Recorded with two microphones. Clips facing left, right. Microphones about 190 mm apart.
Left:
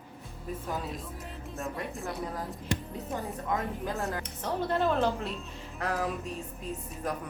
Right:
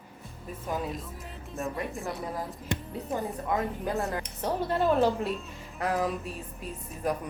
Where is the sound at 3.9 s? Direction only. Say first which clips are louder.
Right 3 dB; 15° right (ahead or behind).